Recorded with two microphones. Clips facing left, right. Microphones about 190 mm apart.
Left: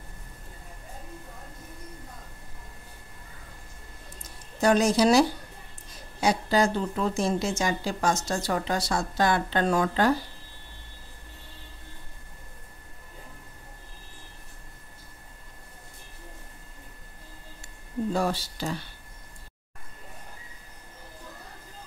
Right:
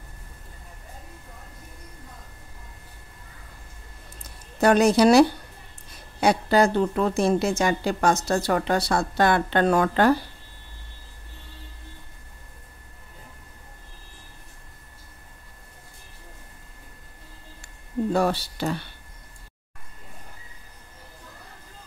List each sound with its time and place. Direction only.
4.2 s a sound: 60° right (ahead or behind)
6.2 s a woman's voice: 60° right (ahead or behind)
18.1 s a woman's voice: 65° right (ahead or behind)